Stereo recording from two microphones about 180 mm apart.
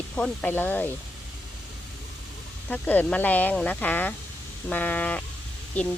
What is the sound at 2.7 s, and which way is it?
Speech, 10° left (ahead or behind).